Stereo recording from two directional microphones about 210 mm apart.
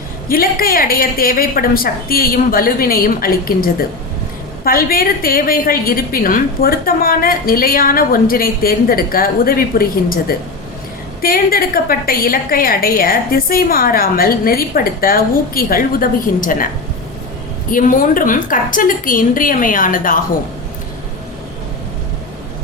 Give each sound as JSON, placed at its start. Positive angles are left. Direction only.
{"t": 0.3, "sound": "a woman's voice", "side_deg": 45}
{"t": 17.7, "sound": "a woman's voice", "side_deg": 40}